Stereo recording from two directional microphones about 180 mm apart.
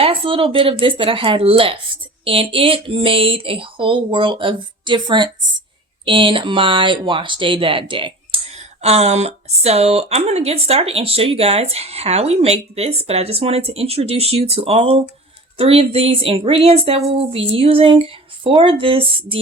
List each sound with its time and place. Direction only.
0.0 s speech: 30° right (ahead or behind)